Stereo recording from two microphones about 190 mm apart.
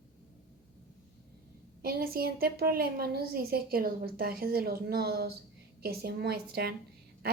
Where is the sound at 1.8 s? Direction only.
50° right (ahead or behind).